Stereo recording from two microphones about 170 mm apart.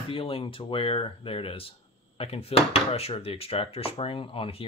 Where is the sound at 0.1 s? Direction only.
30° left (ahead or behind).